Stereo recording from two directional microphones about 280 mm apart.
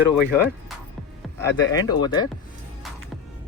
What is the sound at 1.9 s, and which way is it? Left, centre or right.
Speech, centre.